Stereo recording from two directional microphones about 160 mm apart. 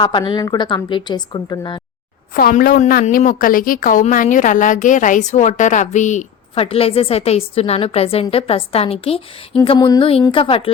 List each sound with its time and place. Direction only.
0.0 s a woman's voice: 30° left (ahead or behind)
2.3 s a woman's voice: 60° left (ahead or behind)
6.5 s a woman's voice: 35° left (ahead or behind)
9.6 s a woman's voice: 25° left (ahead or behind)